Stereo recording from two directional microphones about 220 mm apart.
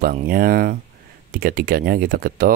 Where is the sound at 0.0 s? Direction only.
40° right (ahead or behind).